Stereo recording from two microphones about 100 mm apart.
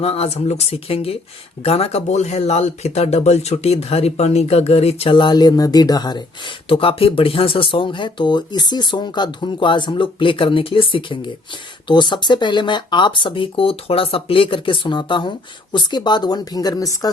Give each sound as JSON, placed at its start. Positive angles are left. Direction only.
{"t": 0.0, "sound": "speech", "side_deg": 90}
{"t": 6.7, "sound": "speech", "side_deg": 65}